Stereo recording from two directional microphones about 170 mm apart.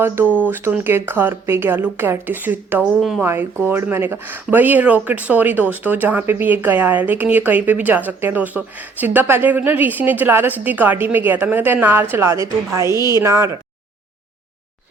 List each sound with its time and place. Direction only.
0.0 s speech: 10° right (ahead or behind)